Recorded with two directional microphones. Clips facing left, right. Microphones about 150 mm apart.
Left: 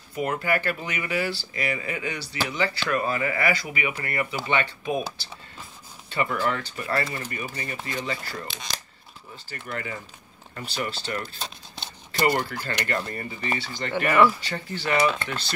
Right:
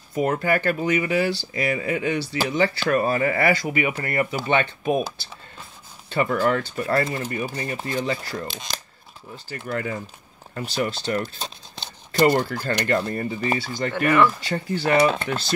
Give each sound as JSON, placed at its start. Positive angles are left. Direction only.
{"t": 0.1, "sound": "speech", "side_deg": -45}
{"t": 6.2, "sound": "speech", "side_deg": -45}
{"t": 9.7, "sound": "speech", "side_deg": -40}
{"t": 12.3, "sound": "speech", "side_deg": -40}
{"t": 14.0, "sound": "speech", "side_deg": 10}
{"t": 14.5, "sound": "speech", "side_deg": -40}
{"t": 15.0, "sound": "speech", "side_deg": -30}